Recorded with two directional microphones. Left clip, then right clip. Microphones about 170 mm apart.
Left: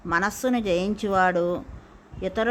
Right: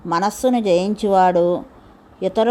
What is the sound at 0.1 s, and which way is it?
A woman's voice, 15° right (ahead or behind).